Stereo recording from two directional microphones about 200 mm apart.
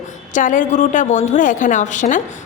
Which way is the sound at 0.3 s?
40° left (ahead or behind).